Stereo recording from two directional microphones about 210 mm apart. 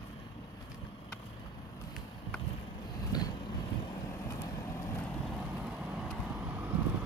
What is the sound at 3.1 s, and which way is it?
Vehicle, 20° left (ahead or behind).